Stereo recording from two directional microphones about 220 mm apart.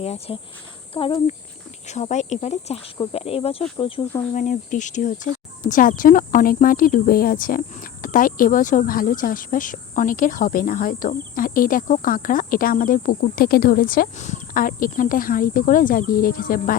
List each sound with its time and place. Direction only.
0.0 s speech: 30° left (ahead or behind)
4.4 s speech: 35° left (ahead or behind)